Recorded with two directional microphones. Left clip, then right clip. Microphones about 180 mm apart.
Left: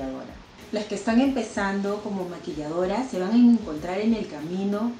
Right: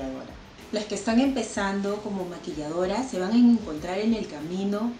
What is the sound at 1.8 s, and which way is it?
Speech, 15° left (ahead or behind).